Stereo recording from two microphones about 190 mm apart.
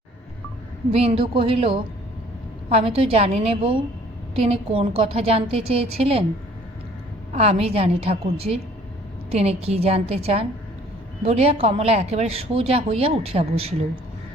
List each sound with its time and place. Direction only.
0.9 s speech: 30° right (ahead or behind)
7.3 s speech: 35° right (ahead or behind)